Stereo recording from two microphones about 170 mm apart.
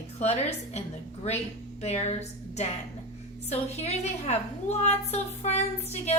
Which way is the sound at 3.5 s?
40° left (ahead or behind).